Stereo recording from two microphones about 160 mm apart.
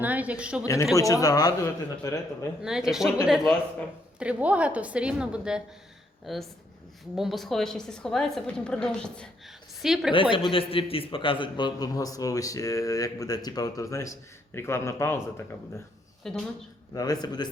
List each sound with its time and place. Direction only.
0.0 s a woman's voice: 10° right (ahead or behind)
0.6 s a man's voice: 20° left (ahead or behind)
2.6 s a woman's voice: 5° right (ahead or behind)
10.3 s a man's voice: 35° left (ahead or behind); by 15.4 s 15° left (ahead or behind)
16.2 s a woman's voice: centre (ahead or behind)
16.9 s a man's voice: 25° left (ahead or behind)